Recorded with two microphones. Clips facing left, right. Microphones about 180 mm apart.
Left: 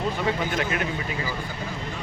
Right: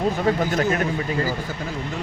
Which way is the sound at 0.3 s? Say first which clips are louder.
Right 7 dB; 45° right (ahead or behind).